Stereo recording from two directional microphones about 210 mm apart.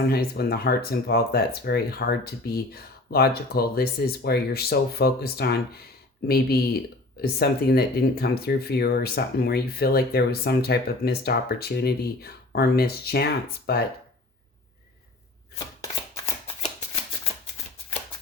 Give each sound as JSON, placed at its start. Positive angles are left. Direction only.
{"t": 0.1, "sound": "speech", "side_deg": 45}